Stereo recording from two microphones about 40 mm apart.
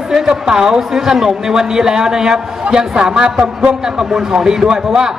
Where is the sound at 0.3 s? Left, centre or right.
Centre.